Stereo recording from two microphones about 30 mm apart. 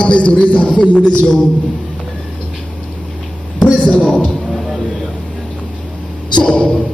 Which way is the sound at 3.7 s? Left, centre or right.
Left.